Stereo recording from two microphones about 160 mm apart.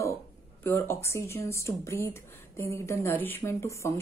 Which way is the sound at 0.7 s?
15° left (ahead or behind).